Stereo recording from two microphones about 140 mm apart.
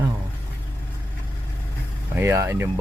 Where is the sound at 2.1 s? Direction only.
20° right (ahead or behind).